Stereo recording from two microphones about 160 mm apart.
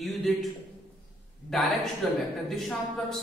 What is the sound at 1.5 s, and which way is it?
Speech, centre (ahead or behind).